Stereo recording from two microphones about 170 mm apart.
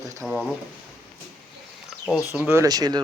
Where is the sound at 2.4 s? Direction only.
15° right (ahead or behind).